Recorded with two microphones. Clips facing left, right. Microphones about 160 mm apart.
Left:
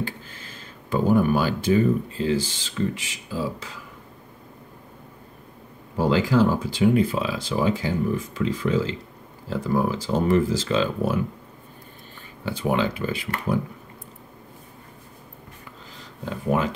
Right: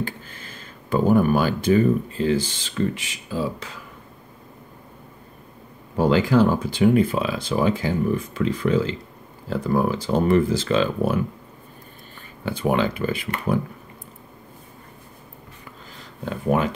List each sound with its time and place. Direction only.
0.0 s speech: 55° right (ahead or behind)
5.9 s speech: 60° right (ahead or behind)
12.4 s speech: 55° right (ahead or behind)